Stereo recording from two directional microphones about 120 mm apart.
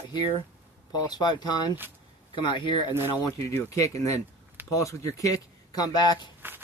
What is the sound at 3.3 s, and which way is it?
Speech, 25° left (ahead or behind).